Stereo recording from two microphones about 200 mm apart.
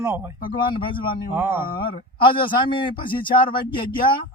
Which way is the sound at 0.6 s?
25° left (ahead or behind).